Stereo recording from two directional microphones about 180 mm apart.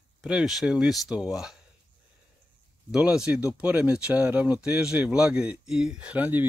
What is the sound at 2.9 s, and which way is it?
Speech, 5° right (ahead or behind).